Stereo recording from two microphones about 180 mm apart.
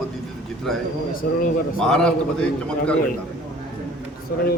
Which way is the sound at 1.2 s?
55° left (ahead or behind).